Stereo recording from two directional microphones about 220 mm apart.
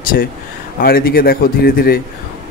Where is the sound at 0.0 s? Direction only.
40° left (ahead or behind).